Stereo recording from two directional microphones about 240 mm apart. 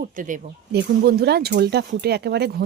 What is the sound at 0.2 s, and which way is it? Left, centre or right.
Speech, right.